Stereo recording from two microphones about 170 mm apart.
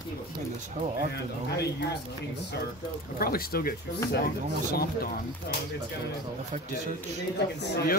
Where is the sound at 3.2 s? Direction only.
60° left (ahead or behind).